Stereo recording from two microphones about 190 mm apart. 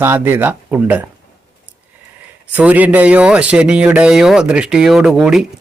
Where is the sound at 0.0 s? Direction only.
10° right (ahead or behind).